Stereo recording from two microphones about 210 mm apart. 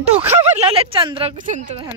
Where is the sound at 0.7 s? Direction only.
25° right (ahead or behind).